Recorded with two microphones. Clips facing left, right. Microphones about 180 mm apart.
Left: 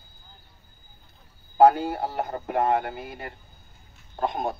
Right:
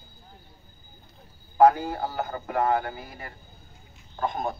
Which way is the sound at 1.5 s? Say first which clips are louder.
Left 1 dB; 25° left (ahead or behind).